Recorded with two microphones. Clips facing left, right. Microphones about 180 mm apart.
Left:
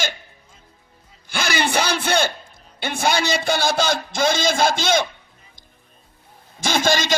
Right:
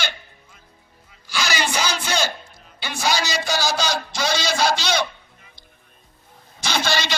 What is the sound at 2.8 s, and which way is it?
A man's voice, 55° left (ahead or behind).